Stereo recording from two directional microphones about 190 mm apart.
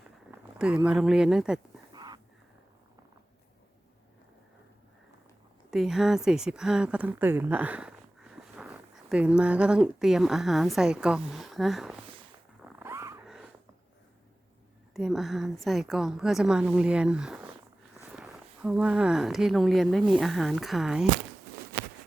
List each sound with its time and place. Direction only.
0.3 s speech: 5° right (ahead or behind)
1.9 s a sound: 20° right (ahead or behind)
5.7 s speech: centre (ahead or behind)
12.6 s cat: 10° right (ahead or behind)
13.2 s wheeze: centre (ahead or behind)
14.9 s a woman's voice: centre (ahead or behind)